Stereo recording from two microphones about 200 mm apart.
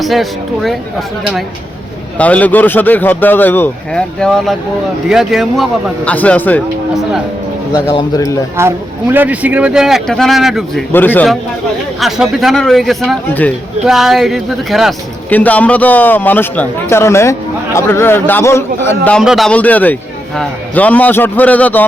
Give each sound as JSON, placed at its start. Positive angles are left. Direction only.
{"t": 0.0, "sound": "a man's voice", "side_deg": 0}
{"t": 7.7, "sound": "a man's voice", "side_deg": 20}
{"t": 8.5, "sound": "speech", "side_deg": -10}
{"t": 10.9, "sound": "a man's voice", "side_deg": 10}